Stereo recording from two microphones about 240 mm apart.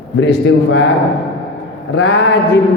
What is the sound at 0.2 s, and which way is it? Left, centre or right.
Speech, left.